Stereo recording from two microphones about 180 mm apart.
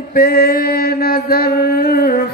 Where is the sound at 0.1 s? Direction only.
60° left (ahead or behind).